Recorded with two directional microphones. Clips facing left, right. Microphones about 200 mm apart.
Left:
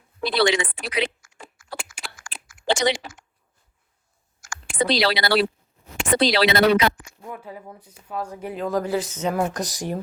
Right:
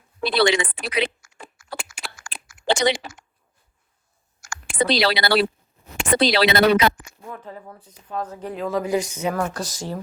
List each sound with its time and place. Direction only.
0.2 s a woman's voice: 60° right (ahead or behind)
1.7 s a sound: 60° right (ahead or behind)
4.4 s a woman's voice: 60° right (ahead or behind)
7.3 s speech: 10° left (ahead or behind)
8.9 s speech: 15° right (ahead or behind)
9.3 s speech: 20° left (ahead or behind)